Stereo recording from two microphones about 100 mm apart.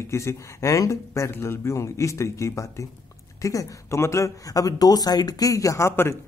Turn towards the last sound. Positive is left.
turn(degrees=25)  # may be behind; listen again after turning